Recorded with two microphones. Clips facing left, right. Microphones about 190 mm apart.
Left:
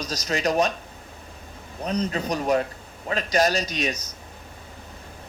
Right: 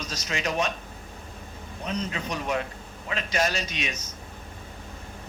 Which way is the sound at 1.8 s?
40° left (ahead or behind).